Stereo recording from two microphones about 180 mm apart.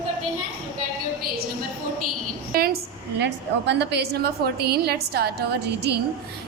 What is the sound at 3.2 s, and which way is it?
A woman's voice, 75° right (ahead or behind).